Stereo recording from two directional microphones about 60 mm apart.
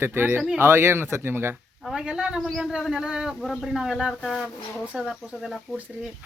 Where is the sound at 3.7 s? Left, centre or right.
Centre.